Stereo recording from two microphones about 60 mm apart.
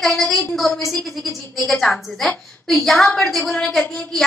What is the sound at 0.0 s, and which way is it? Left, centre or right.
A woman's voice, centre.